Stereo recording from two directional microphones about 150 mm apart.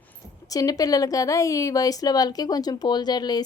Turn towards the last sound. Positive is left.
turn(degrees=25)  # may be behind; listen again after turning